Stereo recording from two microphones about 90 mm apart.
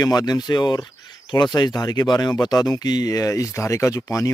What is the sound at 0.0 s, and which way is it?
Speech, 45° left (ahead or behind).